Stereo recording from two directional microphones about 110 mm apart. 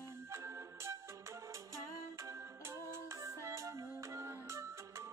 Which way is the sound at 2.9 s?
25° right (ahead or behind).